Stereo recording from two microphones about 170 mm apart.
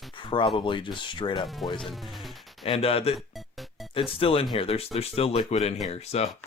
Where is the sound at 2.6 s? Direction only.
35° left (ahead or behind).